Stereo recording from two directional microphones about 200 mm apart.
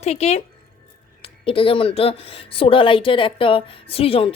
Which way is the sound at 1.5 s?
25° left (ahead or behind).